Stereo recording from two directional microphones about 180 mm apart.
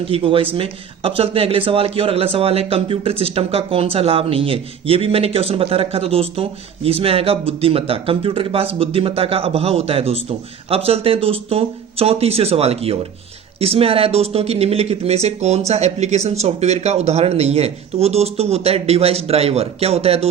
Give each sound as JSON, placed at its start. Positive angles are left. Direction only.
{"t": 0.0, "sound": "speech", "side_deg": -30}